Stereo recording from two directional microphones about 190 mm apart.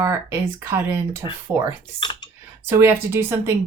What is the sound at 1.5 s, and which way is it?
Speech, 10° right (ahead or behind).